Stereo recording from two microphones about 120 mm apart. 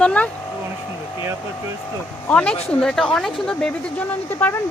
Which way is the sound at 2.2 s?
10° left (ahead or behind).